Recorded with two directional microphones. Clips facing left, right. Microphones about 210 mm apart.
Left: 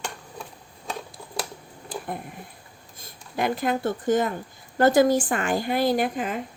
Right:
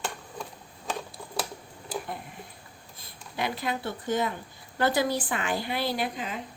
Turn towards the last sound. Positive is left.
turn(degrees=50)  # may be behind; listen again after turning